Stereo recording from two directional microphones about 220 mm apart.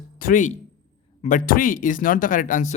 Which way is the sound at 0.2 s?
40° left (ahead or behind).